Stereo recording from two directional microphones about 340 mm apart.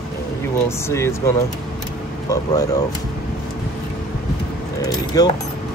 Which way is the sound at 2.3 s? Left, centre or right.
Centre.